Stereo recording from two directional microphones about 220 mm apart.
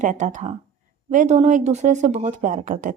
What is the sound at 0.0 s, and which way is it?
Speech, 35° right (ahead or behind).